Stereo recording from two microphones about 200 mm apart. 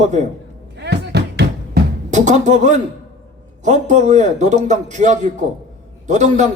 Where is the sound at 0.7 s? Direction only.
55° right (ahead or behind).